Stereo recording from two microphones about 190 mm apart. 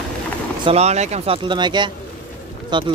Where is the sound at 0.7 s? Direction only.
35° right (ahead or behind).